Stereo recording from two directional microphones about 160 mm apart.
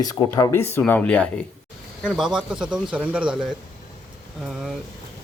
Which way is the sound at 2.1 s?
5° right (ahead or behind).